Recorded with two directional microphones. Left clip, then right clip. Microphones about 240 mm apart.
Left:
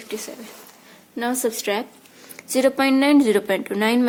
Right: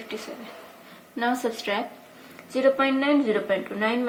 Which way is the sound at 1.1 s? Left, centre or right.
Left.